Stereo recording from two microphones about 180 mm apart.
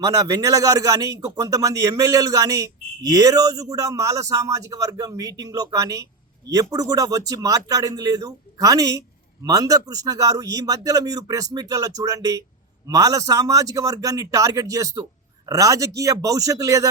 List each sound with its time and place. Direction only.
0.0 s speech: 20° right (ahead or behind)